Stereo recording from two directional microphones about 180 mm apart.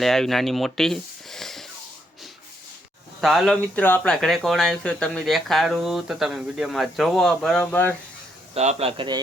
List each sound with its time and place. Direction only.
0.0 s speech: centre (ahead or behind)
3.2 s speech: centre (ahead or behind)
8.5 s speech: 35° right (ahead or behind)